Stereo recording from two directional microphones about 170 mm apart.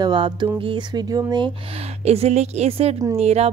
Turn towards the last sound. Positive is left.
turn(degrees=-40)  # may be behind; listen again after turning